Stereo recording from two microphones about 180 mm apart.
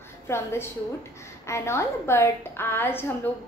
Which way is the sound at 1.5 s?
15° left (ahead or behind).